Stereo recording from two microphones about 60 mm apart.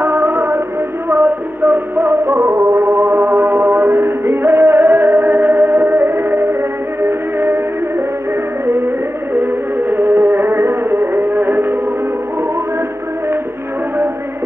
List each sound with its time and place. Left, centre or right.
0.0 s music: right
8.6 s music: right